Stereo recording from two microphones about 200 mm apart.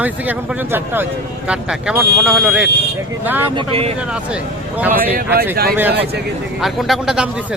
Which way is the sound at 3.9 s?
5° right (ahead or behind).